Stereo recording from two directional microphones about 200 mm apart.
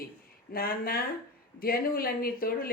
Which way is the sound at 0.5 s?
50° left (ahead or behind).